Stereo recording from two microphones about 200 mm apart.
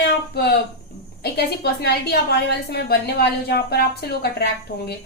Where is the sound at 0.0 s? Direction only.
55° left (ahead or behind).